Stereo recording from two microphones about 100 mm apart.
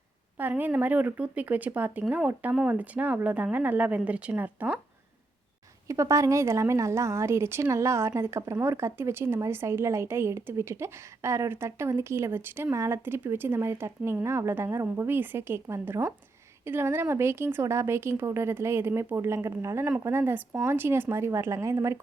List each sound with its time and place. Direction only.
0.3 s speech: 20° right (ahead or behind)
5.9 s a woman's voice: 30° right (ahead or behind)